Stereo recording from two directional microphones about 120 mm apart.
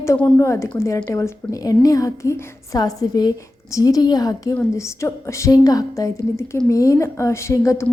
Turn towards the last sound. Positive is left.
turn(degrees=25)  # may be behind; listen again after turning